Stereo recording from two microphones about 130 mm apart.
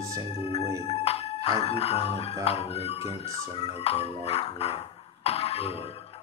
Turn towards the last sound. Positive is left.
turn(degrees=55)  # may be behind; listen again after turning